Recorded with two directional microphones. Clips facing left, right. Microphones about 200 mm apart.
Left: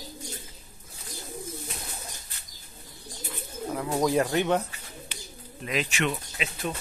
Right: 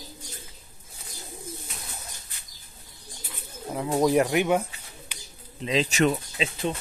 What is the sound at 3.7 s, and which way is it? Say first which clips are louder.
Speech: right 3 dB; 20° right (ahead or behind).